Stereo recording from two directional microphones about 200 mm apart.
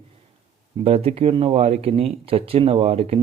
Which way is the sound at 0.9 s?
30° right (ahead or behind).